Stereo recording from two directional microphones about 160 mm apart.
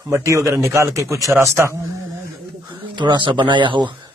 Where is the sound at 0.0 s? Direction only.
20° right (ahead or behind).